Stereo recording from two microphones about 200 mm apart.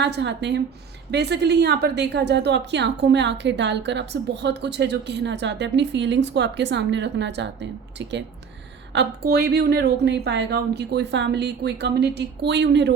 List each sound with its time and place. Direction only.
0.0 s a woman's voice: 60° right (ahead or behind)